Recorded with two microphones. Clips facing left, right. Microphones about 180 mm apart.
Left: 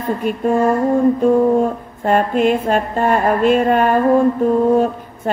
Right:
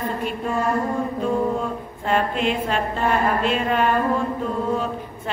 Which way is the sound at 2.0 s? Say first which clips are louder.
Left 7 dB; 45° left (ahead or behind).